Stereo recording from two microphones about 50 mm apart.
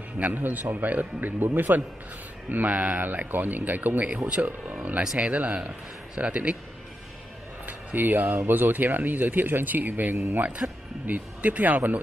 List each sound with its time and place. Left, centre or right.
0.3 s speech: right
5.0 s speech: centre
7.6 s a sound: right
8.5 s speech: right
10.1 s speech: right
10.6 s speech: right
11.1 s speech: right